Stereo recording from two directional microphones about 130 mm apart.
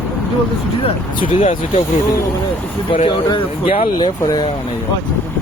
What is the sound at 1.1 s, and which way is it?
Speech, 85° left.